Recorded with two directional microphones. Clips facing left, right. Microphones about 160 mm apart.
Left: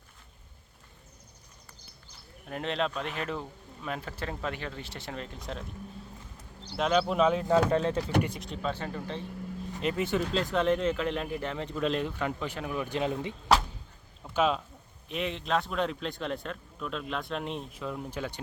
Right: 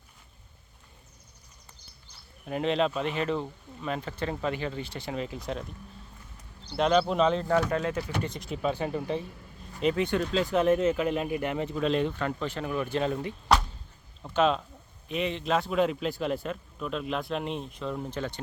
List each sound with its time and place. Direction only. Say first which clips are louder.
2.5 s speech: right 5 dB; centre (ahead or behind)
6.7 s speech: right 2 dB; centre (ahead or behind)
7.4 s speech: left 2 dB; 25° left (ahead or behind)
8.6 s speech: right 5 dB; 15° right (ahead or behind)
9.8 s speech: right 3 dB; centre (ahead or behind)
12.1 s speech: right 2 dB; 10° left (ahead or behind)
14.3 s speech: right 2 dB; 5° left (ahead or behind)